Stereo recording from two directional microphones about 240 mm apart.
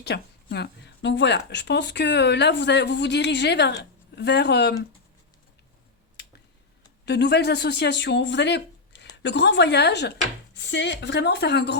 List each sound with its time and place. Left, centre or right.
0.1 s a woman's voice: left
7.0 s a woman's voice: left
10.5 s chopping: left
11.0 s a woman's voice: left